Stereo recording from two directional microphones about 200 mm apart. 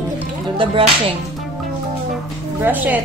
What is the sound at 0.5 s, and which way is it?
Music, 25° right (ahead or behind).